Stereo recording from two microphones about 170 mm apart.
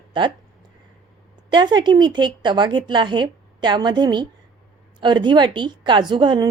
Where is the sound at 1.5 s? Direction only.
25° right (ahead or behind).